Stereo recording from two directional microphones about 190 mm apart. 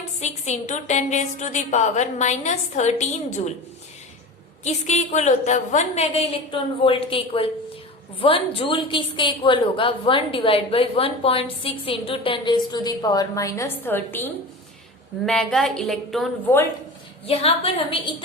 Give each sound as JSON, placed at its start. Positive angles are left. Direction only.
{"t": 0.2, "sound": "a woman's voice", "side_deg": 35}
{"t": 4.6, "sound": "a woman's voice", "side_deg": 35}
{"t": 15.3, "sound": "a woman's voice", "side_deg": 5}
{"t": 17.2, "sound": "a woman's voice", "side_deg": 30}